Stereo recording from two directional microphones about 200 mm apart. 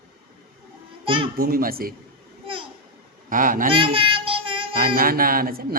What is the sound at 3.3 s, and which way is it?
Speech, 45° right (ahead or behind).